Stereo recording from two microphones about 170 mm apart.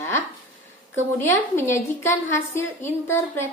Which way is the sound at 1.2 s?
15° left (ahead or behind).